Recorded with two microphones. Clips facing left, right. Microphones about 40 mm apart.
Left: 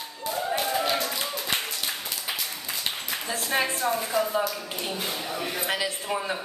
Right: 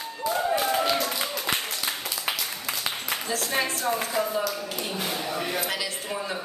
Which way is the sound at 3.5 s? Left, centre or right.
Centre.